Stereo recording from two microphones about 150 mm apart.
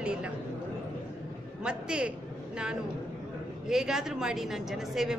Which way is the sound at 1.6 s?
5° right (ahead or behind).